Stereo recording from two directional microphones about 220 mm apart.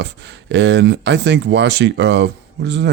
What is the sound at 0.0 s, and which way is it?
Speech, 50° right (ahead or behind).